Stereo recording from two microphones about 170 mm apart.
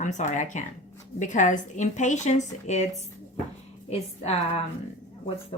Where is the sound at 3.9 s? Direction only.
35° left (ahead or behind).